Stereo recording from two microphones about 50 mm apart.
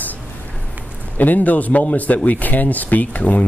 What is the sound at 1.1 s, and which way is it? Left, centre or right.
A man's voice, left.